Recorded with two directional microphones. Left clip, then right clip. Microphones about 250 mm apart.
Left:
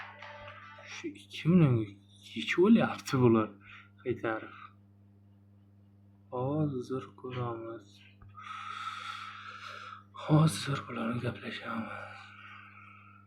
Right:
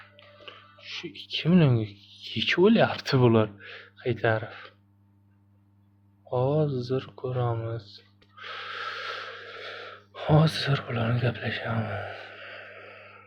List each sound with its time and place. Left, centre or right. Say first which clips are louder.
0.0 s music: left 2 dB; centre
1.0 s speech: right 5 dB; right
6.3 s speech: right 8 dB; right
8.4 s gasp: right 5 dB; right